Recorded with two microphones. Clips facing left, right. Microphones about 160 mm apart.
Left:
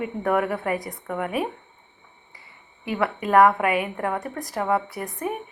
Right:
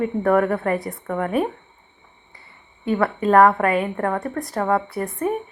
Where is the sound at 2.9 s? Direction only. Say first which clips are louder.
Right 4 dB; 15° left (ahead or behind).